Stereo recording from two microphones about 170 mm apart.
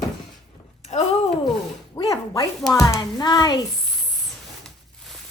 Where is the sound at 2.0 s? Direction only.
20° left (ahead or behind).